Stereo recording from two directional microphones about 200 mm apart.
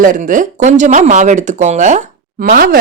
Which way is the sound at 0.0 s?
40° right (ahead or behind).